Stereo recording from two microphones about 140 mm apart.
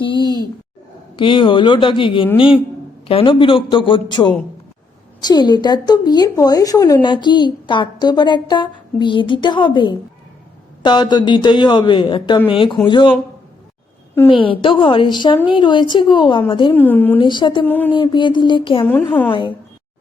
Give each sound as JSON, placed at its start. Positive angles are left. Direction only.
{"t": 0.0, "sound": "a sound", "side_deg": 35}
{"t": 1.1, "sound": "speech", "side_deg": 35}
{"t": 14.3, "sound": "speech", "side_deg": 40}
{"t": 16.7, "sound": "speech", "side_deg": 15}
{"t": 17.2, "sound": "speech", "side_deg": 35}
{"t": 17.7, "sound": "speech", "side_deg": 15}
{"t": 17.9, "sound": "speech", "side_deg": 35}